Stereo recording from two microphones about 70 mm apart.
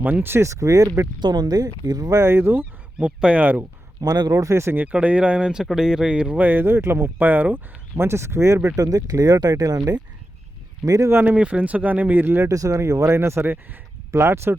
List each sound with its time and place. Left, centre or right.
0.0 s speech: right
0.4 s speech: right
1.2 s speech: right
2.1 s speech: right
3.0 s speech: centre
4.0 s speech: right
4.8 s speech: right
7.9 s speech: right
10.8 s speech: right
11.1 s speech: right
12.5 s speech: right